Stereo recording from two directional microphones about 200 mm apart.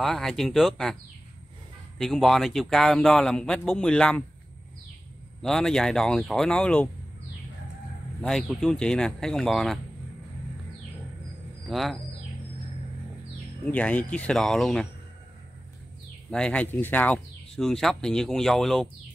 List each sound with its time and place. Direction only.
0.0 s speech: centre (ahead or behind)
2.0 s speech: centre (ahead or behind)
5.4 s speech: centre (ahead or behind)
8.2 s speech: centre (ahead or behind)
11.7 s speech: centre (ahead or behind)
13.7 s speech: 5° left (ahead or behind)
16.3 s speech: 5° left (ahead or behind)